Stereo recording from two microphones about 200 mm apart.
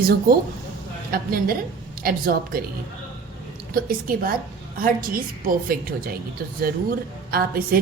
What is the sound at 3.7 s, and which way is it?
A woman's voice, 45° right (ahead or behind).